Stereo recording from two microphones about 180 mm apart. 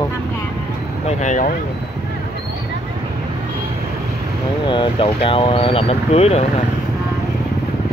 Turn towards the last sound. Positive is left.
turn(degrees=35)  # may be behind; listen again after turning